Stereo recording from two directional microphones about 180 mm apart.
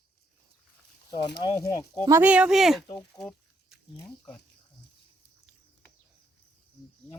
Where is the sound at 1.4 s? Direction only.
25° left (ahead or behind).